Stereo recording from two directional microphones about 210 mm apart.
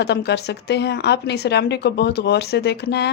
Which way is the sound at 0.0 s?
55° left (ahead or behind).